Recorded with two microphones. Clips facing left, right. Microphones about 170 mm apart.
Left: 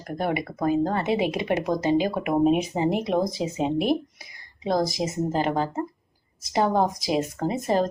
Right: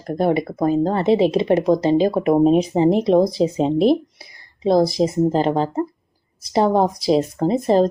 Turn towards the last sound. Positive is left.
turn(degrees=-30)  # may be behind; listen again after turning